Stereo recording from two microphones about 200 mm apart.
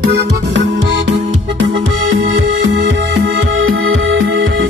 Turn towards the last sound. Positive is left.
turn(degrees=-70)  # may be behind; listen again after turning